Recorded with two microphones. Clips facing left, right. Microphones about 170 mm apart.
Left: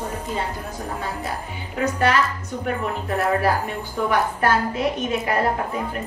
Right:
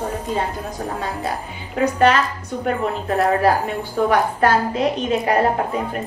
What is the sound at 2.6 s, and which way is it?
Speech, 20° right (ahead or behind).